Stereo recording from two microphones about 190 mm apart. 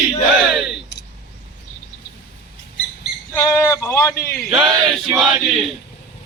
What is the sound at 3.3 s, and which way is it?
Speech, 15° left (ahead or behind).